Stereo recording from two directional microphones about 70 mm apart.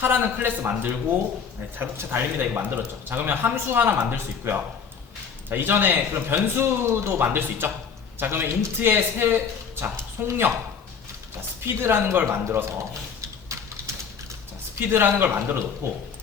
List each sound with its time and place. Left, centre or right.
0.0 s a man's voice: right
11.6 s speech: right
14.8 s speech: right